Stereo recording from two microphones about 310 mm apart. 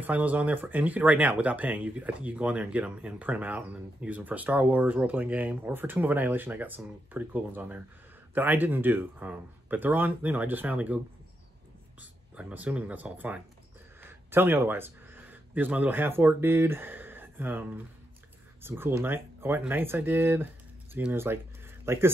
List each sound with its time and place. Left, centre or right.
0.0 s speech: centre
12.0 s a man's voice: centre